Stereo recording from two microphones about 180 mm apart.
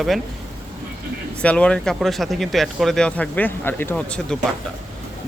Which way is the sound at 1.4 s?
5° left (ahead or behind).